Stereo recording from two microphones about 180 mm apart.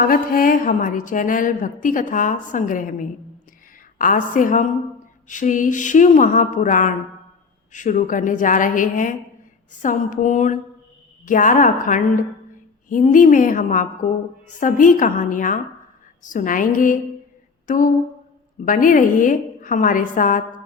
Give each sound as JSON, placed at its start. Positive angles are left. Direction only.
{"t": 0.0, "sound": "speech", "side_deg": 50}
{"t": 17.7, "sound": "a sound", "side_deg": 50}
{"t": 18.6, "sound": "speech", "side_deg": 50}